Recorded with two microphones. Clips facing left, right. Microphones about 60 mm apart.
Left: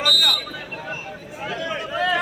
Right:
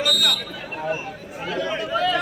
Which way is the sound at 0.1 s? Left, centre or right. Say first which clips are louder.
Left 1 dB; centre.